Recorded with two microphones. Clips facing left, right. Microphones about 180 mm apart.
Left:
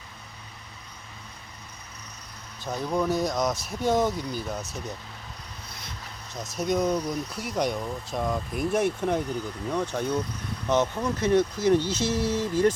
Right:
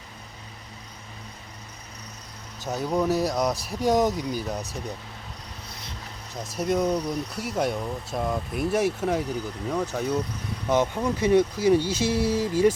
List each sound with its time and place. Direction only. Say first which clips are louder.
2.8 s speech: right 2 dB; 10° right (ahead or behind)
3.5 s speech: right 2 dB; 35° right (ahead or behind)
4.2 s speech: right 3 dB; 10° right (ahead or behind)
6.6 s speech: right 1 dB; 5° right (ahead or behind)